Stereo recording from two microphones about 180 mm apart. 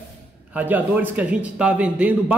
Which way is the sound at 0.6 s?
10° right (ahead or behind).